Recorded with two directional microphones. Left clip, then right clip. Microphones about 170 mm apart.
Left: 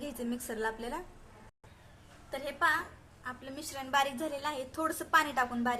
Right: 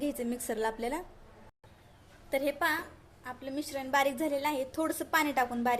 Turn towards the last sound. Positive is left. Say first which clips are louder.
# right 2 dB
turn(degrees=-25)  # may be behind; listen again after turning